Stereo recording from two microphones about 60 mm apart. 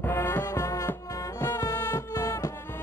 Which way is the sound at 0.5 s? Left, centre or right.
Left.